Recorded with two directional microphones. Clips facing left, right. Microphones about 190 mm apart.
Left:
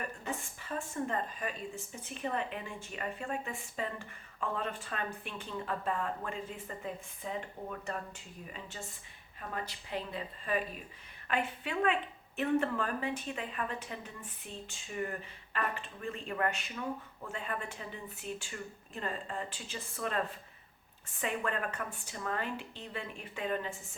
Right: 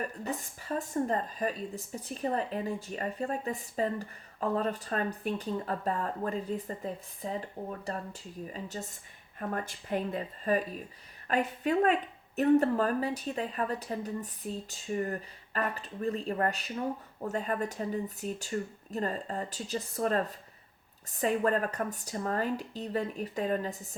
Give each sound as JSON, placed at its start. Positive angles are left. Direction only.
{"t": 0.0, "sound": "speech", "side_deg": -40}